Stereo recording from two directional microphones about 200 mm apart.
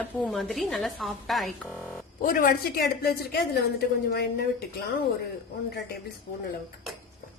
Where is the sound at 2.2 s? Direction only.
45° left (ahead or behind).